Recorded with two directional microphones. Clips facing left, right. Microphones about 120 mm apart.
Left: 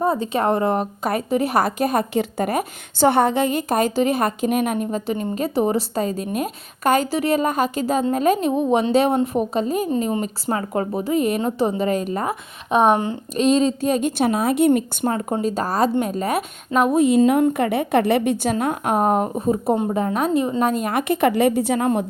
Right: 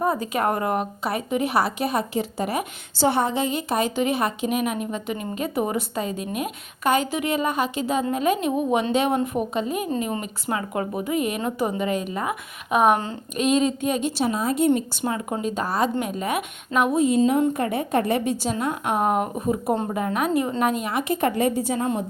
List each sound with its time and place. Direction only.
0.0 s a woman's voice: 25° left (ahead or behind)
1.0 s a woman's voice: 40° left (ahead or behind)
14.0 s speech: 60° left (ahead or behind)
15.0 s a woman's voice: 40° left (ahead or behind)
16.9 s a woman's voice: 60° left (ahead or behind)
18.5 s a woman's voice: 45° left (ahead or behind)
20.9 s a woman's voice: 75° left (ahead or behind)